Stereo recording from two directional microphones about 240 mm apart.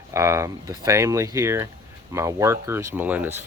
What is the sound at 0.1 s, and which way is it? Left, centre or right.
Speech, centre.